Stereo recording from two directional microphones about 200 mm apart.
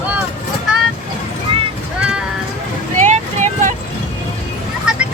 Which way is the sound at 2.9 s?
35° right (ahead or behind).